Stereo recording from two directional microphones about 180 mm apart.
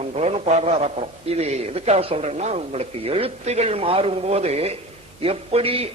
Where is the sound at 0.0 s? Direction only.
35° right (ahead or behind).